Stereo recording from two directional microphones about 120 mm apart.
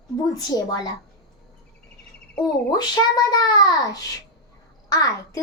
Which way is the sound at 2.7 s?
35° left (ahead or behind).